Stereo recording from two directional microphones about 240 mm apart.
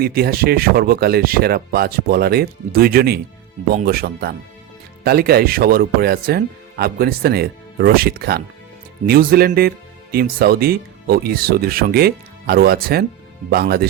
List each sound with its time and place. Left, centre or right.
0.0 s speech: right